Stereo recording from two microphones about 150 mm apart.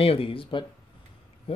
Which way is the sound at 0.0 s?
40° left (ahead or behind).